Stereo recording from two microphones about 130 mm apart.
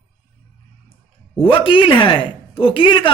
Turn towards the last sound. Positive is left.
turn(degrees=40)  # may be behind; listen again after turning